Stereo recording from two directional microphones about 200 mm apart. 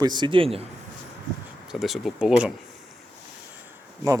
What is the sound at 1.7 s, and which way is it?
Speech, centre (ahead or behind).